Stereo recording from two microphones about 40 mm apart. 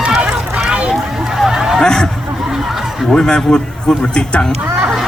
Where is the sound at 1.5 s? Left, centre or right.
Centre.